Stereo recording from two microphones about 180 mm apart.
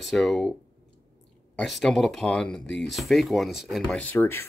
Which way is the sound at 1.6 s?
Centre (ahead or behind).